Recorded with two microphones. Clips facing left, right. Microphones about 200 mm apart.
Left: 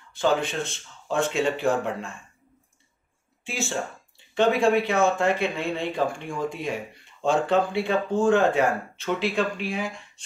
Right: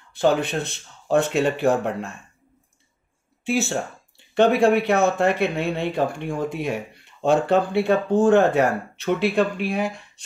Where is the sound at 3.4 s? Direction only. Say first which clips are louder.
Right 6 dB; 65° right (ahead or behind).